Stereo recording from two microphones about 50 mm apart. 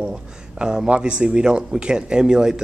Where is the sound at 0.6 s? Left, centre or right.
Centre.